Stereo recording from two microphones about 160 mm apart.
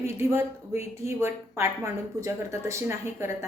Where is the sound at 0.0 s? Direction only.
20° right (ahead or behind).